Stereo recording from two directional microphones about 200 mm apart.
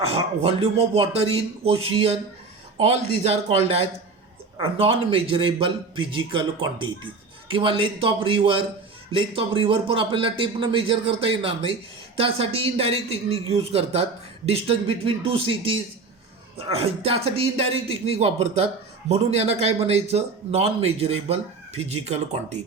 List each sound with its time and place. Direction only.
0.0 s speech: 30° right (ahead or behind)